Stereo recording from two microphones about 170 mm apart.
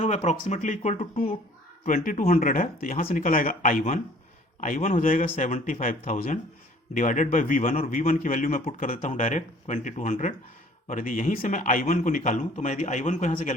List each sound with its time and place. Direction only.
0.0 s a man's voice: 45° left (ahead or behind)
3.0 s a man's voice: 40° left (ahead or behind)
5.2 s a man's voice: 40° left (ahead or behind)